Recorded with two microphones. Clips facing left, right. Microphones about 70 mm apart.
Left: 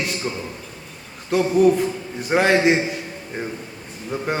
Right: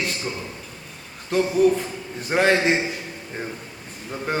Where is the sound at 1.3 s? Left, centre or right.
Centre.